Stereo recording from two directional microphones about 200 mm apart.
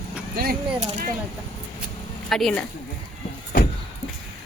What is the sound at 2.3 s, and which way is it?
Speech, 5° left (ahead or behind).